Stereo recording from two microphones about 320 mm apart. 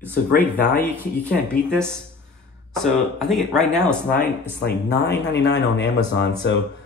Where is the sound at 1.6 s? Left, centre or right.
Centre.